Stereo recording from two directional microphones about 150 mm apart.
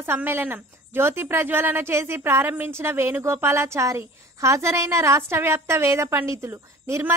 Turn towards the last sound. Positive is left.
turn(degrees=-20)  # may be behind; listen again after turning